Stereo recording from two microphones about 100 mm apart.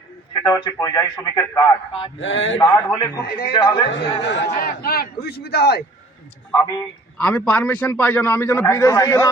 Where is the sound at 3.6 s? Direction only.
70° left (ahead or behind).